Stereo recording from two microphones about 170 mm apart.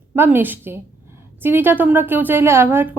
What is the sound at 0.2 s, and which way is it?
A woman's voice, 10° right (ahead or behind).